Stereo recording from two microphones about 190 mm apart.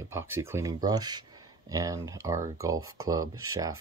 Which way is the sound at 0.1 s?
15° right (ahead or behind).